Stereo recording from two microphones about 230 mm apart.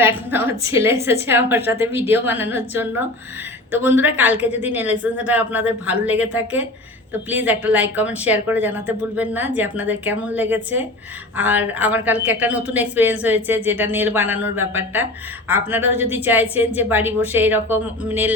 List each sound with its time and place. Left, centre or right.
0.0 s a woman's voice: centre